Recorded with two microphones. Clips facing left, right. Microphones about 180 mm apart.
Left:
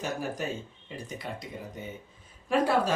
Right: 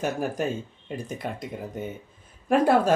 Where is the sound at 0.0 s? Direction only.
50° right (ahead or behind).